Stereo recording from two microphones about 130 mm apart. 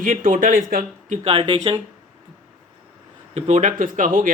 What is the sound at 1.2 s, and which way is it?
Speech, 45° right (ahead or behind).